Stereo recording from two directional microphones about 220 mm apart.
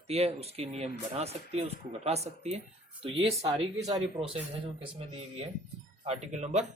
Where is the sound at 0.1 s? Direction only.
30° right (ahead or behind).